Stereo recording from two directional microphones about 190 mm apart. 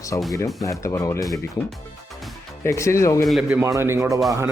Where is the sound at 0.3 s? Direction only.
15° left (ahead or behind).